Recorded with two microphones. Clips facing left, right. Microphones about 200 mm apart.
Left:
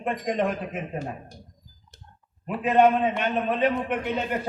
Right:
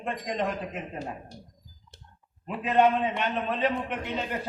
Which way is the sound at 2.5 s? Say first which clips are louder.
Left 3 dB; 50° left (ahead or behind).